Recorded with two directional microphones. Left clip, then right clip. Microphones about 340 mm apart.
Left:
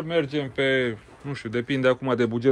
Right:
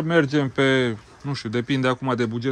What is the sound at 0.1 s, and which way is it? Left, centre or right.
Speech, right.